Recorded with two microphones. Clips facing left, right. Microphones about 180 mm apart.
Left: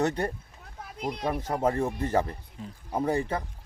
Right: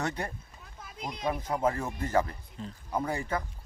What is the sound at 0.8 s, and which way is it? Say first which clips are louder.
Speech: left 5 dB; 60° left (ahead or behind).